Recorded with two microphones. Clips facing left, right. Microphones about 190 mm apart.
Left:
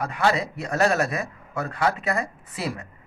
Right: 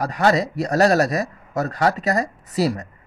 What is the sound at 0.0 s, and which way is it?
Speech, 40° right (ahead or behind).